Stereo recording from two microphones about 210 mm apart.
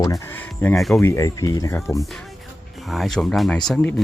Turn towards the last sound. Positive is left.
turn(degrees=5)  # may be behind; listen again after turning